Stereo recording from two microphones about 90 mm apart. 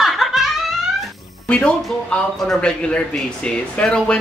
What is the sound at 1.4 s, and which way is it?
A man's voice, 10° left (ahead or behind).